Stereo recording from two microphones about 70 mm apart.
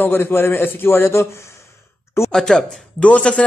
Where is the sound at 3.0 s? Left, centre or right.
Centre.